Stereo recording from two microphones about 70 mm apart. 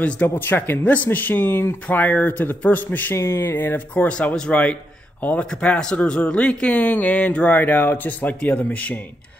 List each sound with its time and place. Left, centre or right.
0.0 s speech: left
3.2 s speech: left; by 9.0 s centre